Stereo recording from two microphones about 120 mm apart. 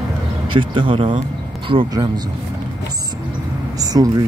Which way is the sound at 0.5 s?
45° right (ahead or behind).